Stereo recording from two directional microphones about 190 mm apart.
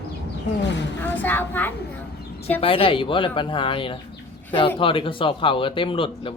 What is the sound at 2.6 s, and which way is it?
Speech, 30° left (ahead or behind).